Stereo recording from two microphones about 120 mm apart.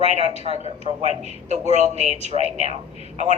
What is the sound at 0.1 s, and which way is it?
Speech, 60° right (ahead or behind).